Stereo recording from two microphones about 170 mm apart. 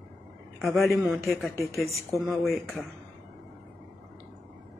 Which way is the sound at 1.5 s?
15° left (ahead or behind).